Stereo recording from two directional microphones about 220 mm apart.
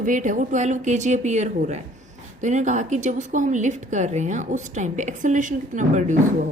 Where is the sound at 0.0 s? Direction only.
35° right (ahead or behind).